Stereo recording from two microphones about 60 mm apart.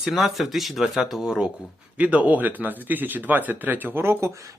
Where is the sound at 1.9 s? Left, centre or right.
Right.